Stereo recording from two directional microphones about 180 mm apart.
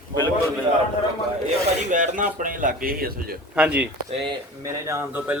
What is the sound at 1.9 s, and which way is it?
Speech, 45° right (ahead or behind).